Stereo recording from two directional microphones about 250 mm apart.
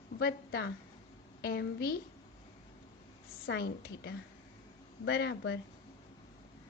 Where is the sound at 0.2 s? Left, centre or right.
Left.